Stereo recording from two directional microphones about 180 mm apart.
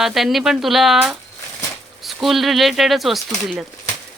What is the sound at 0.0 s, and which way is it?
Speech, centre (ahead or behind).